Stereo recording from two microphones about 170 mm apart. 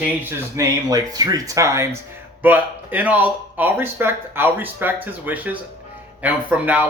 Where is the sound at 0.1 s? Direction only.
10° right (ahead or behind).